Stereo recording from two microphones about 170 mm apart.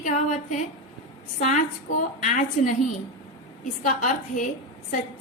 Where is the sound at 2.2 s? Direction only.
45° left (ahead or behind).